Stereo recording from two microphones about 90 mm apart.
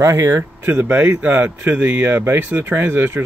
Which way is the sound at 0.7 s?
20° right (ahead or behind).